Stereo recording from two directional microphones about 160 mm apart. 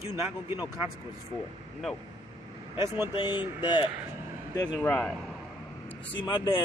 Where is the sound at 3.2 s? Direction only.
30° left (ahead or behind).